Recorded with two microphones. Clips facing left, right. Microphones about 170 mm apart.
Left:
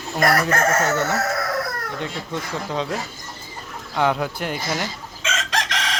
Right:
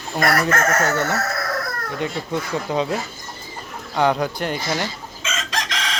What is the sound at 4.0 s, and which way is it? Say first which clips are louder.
Speech: right 2 dB; centre (ahead or behind).